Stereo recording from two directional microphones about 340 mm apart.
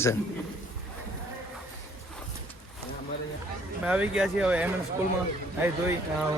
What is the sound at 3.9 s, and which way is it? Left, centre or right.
Speech, centre.